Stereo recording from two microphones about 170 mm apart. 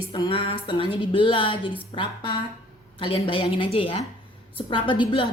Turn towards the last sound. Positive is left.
turn(degrees=30)  # may be behind; listen again after turning